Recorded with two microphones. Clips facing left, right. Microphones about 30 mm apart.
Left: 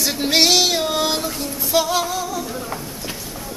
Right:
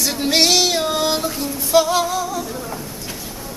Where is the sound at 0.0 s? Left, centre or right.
Centre.